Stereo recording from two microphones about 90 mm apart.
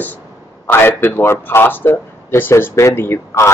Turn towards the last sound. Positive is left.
turn(degrees=25)  # may be behind; listen again after turning